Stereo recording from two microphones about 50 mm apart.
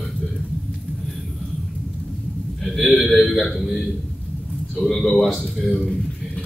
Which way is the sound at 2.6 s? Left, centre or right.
Centre.